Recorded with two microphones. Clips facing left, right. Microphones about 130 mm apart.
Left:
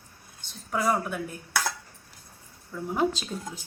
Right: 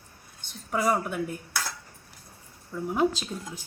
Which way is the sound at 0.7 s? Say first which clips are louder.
Right 1 dB; 15° right (ahead or behind).